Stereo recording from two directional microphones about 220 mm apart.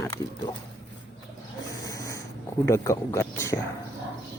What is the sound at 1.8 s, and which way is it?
Snort, 15° left (ahead or behind).